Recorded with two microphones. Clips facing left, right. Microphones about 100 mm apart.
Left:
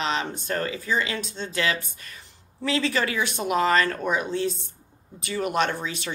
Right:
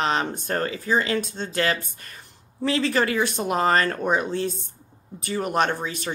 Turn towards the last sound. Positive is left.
turn(degrees=-45)  # may be behind; listen again after turning